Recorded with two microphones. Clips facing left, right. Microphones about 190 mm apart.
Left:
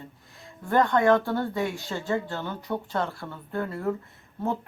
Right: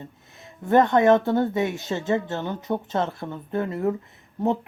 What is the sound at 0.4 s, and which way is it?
Speech, 20° right (ahead or behind).